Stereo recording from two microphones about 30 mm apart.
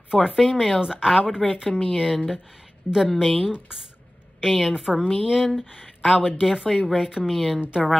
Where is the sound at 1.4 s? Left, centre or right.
Centre.